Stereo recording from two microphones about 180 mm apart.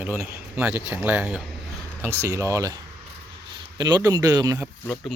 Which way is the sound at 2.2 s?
15° right (ahead or behind).